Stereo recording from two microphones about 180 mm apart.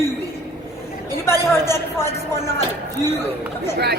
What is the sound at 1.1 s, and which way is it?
A woman's voice, 15° left (ahead or behind).